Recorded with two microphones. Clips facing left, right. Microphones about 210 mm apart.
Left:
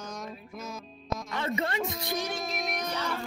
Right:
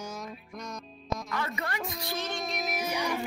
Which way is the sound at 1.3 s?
25° left (ahead or behind).